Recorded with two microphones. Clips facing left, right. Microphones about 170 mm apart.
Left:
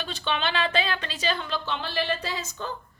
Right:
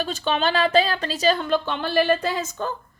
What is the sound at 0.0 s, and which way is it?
Speech, 40° right (ahead or behind).